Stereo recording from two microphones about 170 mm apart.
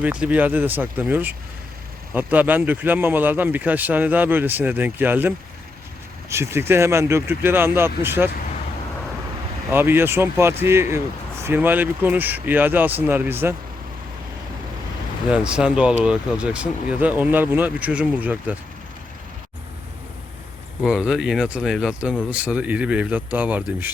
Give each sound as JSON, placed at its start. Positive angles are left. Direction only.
{"t": 0.0, "sound": "speech", "side_deg": -10}
{"t": 9.7, "sound": "speech", "side_deg": -15}
{"t": 15.3, "sound": "speech", "side_deg": -5}
{"t": 20.8, "sound": "speech", "side_deg": -5}